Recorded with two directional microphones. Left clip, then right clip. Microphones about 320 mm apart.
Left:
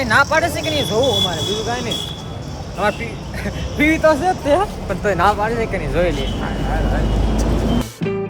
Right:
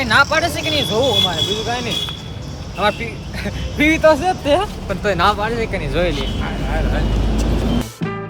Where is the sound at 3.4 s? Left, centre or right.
Centre.